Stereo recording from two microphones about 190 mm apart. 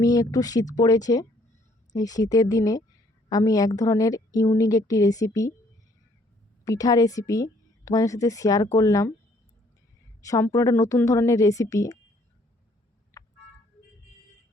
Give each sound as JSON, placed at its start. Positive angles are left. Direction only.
{"t": 0.0, "sound": "a woman's voice", "side_deg": 20}
{"t": 6.7, "sound": "a woman's voice", "side_deg": 20}
{"t": 10.2, "sound": "a woman's voice", "side_deg": 15}
{"t": 13.1, "sound": "a sound", "side_deg": 10}